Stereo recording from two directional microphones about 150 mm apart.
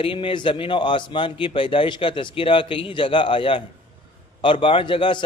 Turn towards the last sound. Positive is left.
turn(degrees=35)  # may be behind; listen again after turning